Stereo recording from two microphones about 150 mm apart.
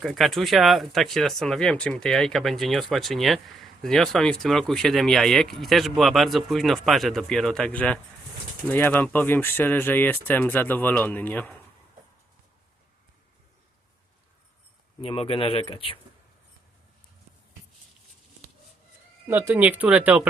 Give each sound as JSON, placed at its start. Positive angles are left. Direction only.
{"t": 0.0, "sound": "speech", "side_deg": 0}
{"t": 15.0, "sound": "speech", "side_deg": 35}
{"t": 19.3, "sound": "speech", "side_deg": -10}